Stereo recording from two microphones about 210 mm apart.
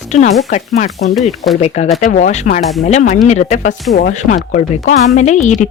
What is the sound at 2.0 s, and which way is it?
Speech, 35° left (ahead or behind).